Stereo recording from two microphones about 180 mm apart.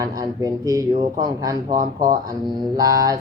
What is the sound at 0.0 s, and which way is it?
Speech, 20° right (ahead or behind).